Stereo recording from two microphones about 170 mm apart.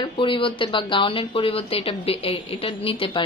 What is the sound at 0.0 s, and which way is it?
A woman's voice, 30° left (ahead or behind).